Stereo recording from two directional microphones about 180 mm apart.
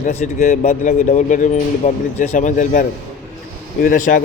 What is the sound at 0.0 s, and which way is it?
Speech, 45° left (ahead or behind).